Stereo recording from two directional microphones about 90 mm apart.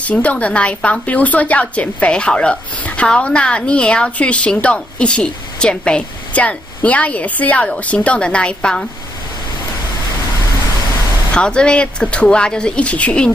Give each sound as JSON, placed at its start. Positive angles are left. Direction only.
{"t": 0.0, "sound": "speech", "side_deg": 15}
{"t": 11.3, "sound": "speech", "side_deg": 10}